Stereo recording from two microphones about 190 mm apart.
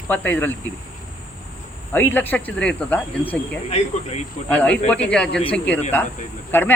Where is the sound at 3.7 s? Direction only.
35° left (ahead or behind).